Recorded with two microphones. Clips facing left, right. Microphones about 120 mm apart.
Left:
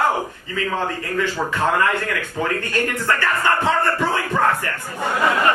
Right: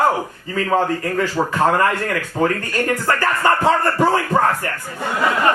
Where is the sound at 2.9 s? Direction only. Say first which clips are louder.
Right 3 dB; 35° right (ahead or behind).